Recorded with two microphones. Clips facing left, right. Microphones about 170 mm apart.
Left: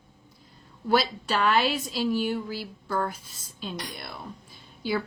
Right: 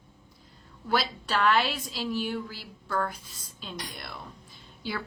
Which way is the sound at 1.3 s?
25° left (ahead or behind).